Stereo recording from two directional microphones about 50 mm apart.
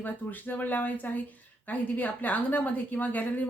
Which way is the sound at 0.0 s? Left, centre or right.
Left.